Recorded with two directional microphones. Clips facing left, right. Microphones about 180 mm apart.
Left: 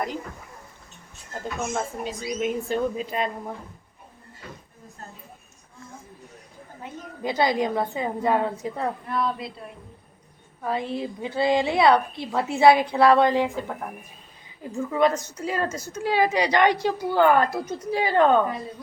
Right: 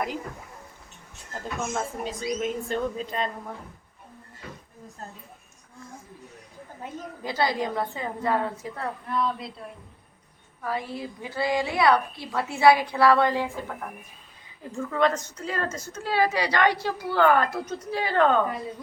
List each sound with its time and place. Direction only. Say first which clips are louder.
1.7 s a woman's voice: left 1 dB; 5° left (ahead or behind)
7.2 s a woman's voice: left 4 dB; 20° left (ahead or behind)
9.0 s speech: left 1 dB; centre (ahead or behind)
10.6 s a woman's voice: left 4 dB; 25° left (ahead or behind)
14.8 s a woman's voice: left 2 dB; 10° left (ahead or behind)